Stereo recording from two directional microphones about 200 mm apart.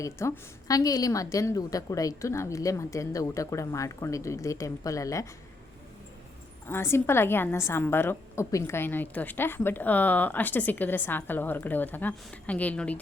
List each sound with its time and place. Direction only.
0.0 s a woman's voice: 15° left (ahead or behind)
6.7 s a woman's voice: 10° left (ahead or behind)